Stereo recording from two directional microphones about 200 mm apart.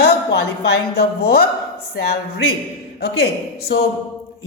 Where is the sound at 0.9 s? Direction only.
50° left (ahead or behind).